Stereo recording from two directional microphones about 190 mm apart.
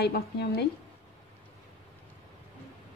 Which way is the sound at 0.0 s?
55° left (ahead or behind).